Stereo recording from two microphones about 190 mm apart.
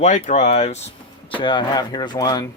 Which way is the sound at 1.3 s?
25° left (ahead or behind).